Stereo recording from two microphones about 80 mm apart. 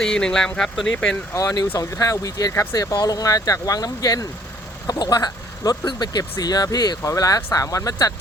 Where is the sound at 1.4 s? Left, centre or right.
Left.